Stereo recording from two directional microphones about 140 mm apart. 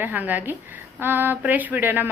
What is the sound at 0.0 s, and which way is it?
A woman's voice, 10° right (ahead or behind).